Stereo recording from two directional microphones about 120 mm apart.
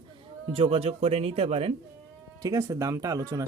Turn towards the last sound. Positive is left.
turn(degrees=-30)  # may be behind; listen again after turning